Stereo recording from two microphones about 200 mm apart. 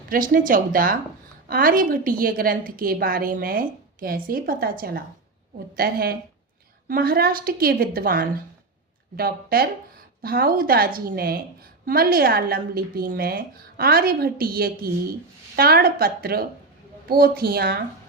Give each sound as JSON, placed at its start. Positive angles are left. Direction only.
{"t": 0.1, "sound": "a woman's voice", "side_deg": -45}